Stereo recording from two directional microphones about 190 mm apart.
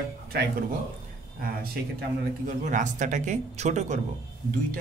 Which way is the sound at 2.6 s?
40° right (ahead or behind).